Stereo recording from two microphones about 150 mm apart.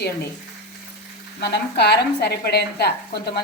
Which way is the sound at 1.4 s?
90° left.